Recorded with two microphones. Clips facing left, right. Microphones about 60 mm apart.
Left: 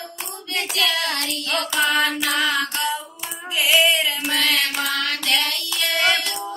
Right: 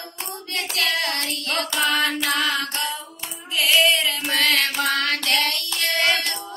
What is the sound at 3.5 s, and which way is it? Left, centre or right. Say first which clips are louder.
Music: left 1 dB; centre.